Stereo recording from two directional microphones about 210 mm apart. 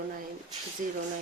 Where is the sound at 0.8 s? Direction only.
35° right (ahead or behind).